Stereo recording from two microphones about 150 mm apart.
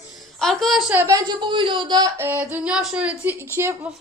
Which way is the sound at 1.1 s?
30° right (ahead or behind).